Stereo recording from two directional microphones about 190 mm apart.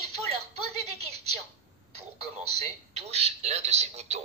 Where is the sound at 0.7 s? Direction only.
35° right (ahead or behind).